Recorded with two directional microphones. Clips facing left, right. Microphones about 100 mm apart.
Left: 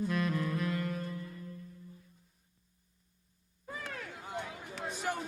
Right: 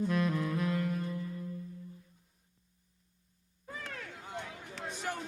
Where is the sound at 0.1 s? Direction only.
Centre (ahead or behind).